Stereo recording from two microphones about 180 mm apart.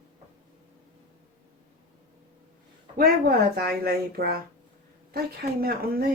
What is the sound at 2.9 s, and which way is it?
A child's voice, 60° right (ahead or behind).